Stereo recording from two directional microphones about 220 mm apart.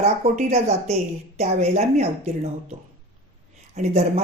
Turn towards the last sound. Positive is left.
turn(degrees=-30)  # may be behind; listen again after turning